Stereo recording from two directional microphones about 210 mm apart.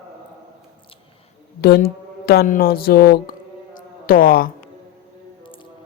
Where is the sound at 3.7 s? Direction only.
45° left (ahead or behind).